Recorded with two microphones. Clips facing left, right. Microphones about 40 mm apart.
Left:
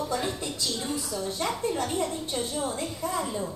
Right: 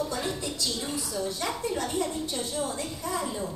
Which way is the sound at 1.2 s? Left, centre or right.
Centre.